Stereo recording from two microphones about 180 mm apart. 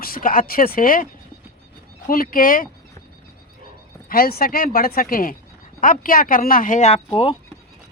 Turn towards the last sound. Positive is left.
turn(degrees=30)  # may be behind; listen again after turning